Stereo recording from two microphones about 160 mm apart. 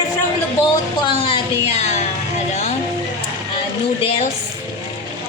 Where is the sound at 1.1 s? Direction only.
35° left (ahead or behind).